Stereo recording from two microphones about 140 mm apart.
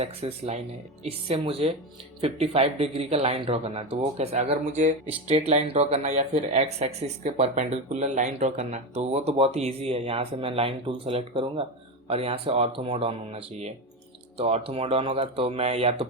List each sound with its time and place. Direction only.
0.0 s speech: 50° right (ahead or behind)